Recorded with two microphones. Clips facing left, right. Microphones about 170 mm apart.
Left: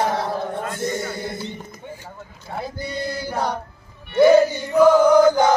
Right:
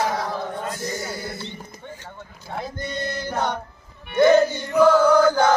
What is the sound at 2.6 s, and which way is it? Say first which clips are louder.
Male singing: left 1 dB; 5° left (ahead or behind).